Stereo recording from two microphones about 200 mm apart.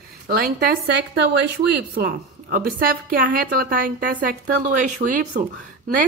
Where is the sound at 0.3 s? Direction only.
50° right (ahead or behind).